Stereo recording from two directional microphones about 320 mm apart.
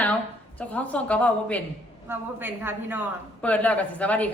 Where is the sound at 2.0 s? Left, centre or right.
Centre.